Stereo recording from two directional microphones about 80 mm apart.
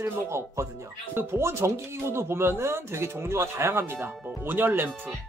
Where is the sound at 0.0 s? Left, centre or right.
Right.